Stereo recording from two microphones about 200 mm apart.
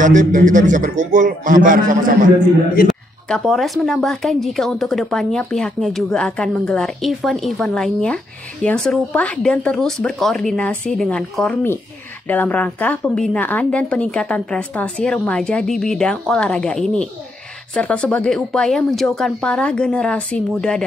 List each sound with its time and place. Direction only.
0.0 s a man's voice: 40° right (ahead or behind)
2.9 s a woman's voice: centre (ahead or behind)